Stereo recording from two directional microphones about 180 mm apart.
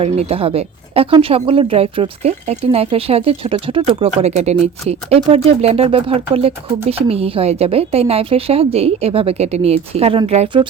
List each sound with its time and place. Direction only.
0.0 s speech: 35° right (ahead or behind)